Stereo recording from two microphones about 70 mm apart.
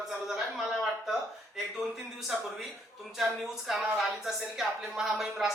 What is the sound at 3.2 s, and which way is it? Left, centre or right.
Speech, centre.